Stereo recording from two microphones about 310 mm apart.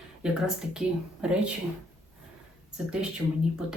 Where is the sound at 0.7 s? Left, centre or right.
Centre.